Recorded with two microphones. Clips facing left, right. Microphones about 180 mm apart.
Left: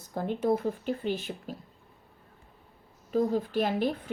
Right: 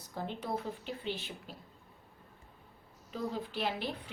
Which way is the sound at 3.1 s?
40° left (ahead or behind).